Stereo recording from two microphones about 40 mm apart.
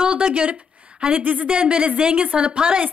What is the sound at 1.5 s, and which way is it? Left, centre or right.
A woman's voice, right.